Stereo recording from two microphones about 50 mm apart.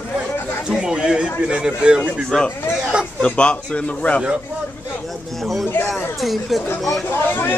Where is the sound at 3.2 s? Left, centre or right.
Left.